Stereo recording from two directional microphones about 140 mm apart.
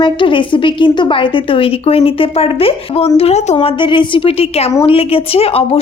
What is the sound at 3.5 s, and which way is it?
A woman's voice, 35° left (ahead or behind).